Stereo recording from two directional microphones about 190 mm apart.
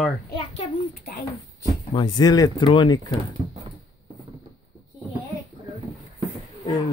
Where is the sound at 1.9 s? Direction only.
20° left (ahead or behind).